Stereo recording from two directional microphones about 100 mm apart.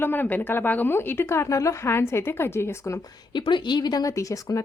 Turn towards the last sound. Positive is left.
turn(degrees=35)  # may be behind; listen again after turning